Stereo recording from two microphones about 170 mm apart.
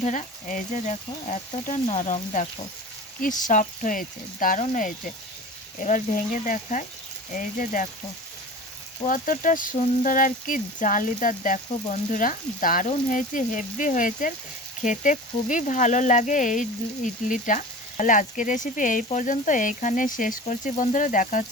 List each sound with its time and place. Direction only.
0.0 s speech: 45° left (ahead or behind)
3.2 s speech: 50° left (ahead or behind)
9.0 s speech: 50° left (ahead or behind)